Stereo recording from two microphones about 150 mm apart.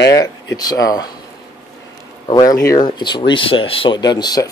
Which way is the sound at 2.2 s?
25° left (ahead or behind).